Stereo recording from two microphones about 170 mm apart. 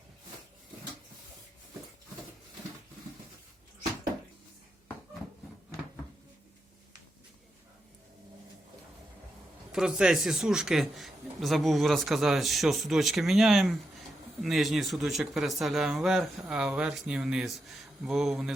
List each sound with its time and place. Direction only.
9.7 s a man's voice: 5° right (ahead or behind)